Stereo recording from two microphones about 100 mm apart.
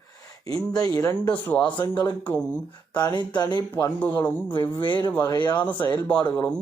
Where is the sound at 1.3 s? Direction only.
15° left (ahead or behind).